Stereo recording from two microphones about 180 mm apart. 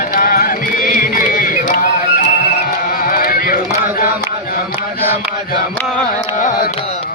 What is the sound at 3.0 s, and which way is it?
Music, 50° left (ahead or behind).